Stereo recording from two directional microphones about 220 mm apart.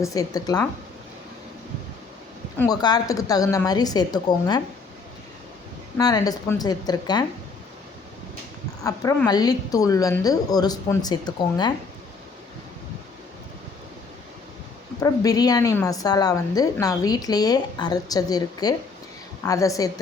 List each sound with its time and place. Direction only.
0.0 s a woman's voice: 15° left (ahead or behind)
2.6 s a woman's voice: 20° left (ahead or behind)
6.0 s a woman's voice: 15° left (ahead or behind)
8.8 s a woman's voice: 15° left (ahead or behind)
15.0 s a woman's voice: 15° left (ahead or behind)